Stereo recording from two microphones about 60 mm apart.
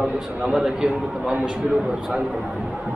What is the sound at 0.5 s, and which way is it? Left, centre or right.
A man's voice, centre.